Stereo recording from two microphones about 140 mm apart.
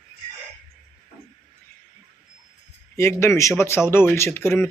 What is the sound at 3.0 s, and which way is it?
Speech, 20° left (ahead or behind).